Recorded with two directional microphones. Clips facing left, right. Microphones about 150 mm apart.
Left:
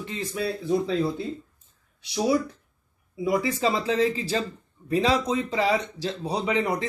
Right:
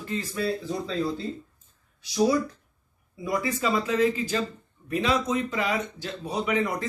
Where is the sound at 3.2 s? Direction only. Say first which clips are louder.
Left 4 dB; 20° left (ahead or behind).